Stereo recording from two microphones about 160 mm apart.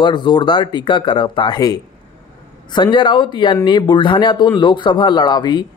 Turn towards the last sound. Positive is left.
turn(degrees=25)  # may be behind; listen again after turning